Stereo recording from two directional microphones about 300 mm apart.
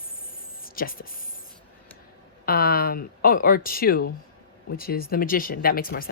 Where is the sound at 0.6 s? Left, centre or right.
Left.